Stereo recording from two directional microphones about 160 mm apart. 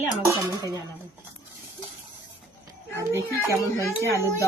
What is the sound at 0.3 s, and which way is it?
Speech, 20° right (ahead or behind).